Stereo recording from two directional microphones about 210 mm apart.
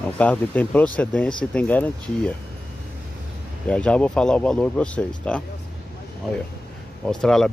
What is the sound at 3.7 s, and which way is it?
Speech, 5° left (ahead or behind).